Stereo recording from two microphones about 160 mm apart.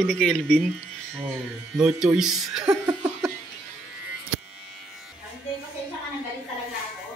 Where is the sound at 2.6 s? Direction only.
25° right (ahead or behind).